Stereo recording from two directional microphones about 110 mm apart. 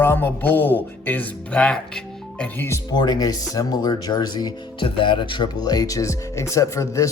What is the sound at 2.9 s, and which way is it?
Speech, 40° left (ahead or behind).